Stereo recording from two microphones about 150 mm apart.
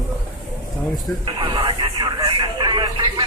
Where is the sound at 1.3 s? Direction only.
30° right (ahead or behind).